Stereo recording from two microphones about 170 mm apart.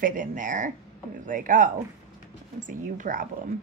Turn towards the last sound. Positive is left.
turn(degrees=-50)  # may be behind; listen again after turning